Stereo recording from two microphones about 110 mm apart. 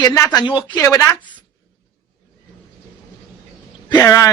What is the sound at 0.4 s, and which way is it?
Speech, 45° left (ahead or behind).